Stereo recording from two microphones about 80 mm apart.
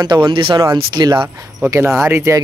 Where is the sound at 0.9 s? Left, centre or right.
Right.